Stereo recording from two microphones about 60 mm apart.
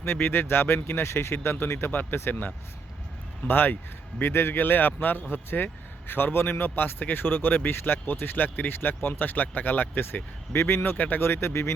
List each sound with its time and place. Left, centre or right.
0.2 s speech: left
10.5 s speech: left
10.9 s speech: left
11.2 s speech: left